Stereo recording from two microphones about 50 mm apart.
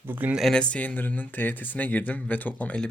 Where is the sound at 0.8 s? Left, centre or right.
Left.